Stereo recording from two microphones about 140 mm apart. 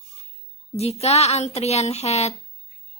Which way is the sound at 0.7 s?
50° left (ahead or behind).